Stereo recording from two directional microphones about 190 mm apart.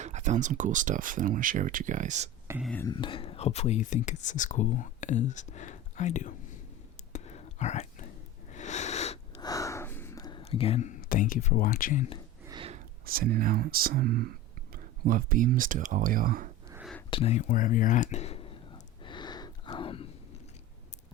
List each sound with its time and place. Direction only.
0.0 s speech: 40° right (ahead or behind)
2.6 s speech: centre (ahead or behind)
2.8 s speech: 25° left (ahead or behind)
7.1 s a sound: 35° left (ahead or behind)
9.4 s gasp: 20° left (ahead or behind)
10.4 s speech: 30° left (ahead or behind); by 12.0 s 45° left (ahead or behind)
12.5 s a sound: 30° right (ahead or behind)
13.1 s speech: 50° right (ahead or behind)
17.1 s speech: 30° left (ahead or behind)
19.0 s a sound: 25° left (ahead or behind)